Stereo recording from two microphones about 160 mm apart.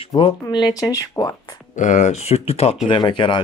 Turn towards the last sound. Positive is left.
turn(degrees=30)  # may be behind; listen again after turning